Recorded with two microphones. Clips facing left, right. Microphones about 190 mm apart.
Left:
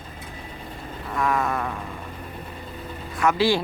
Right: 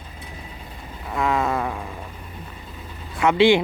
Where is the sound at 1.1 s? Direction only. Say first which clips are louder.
Right 2 dB; 20° right (ahead or behind).